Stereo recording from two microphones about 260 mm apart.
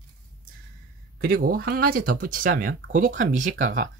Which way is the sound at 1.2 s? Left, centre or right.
Right.